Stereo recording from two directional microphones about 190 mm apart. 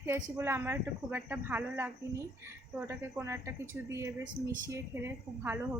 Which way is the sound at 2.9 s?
15° right (ahead or behind).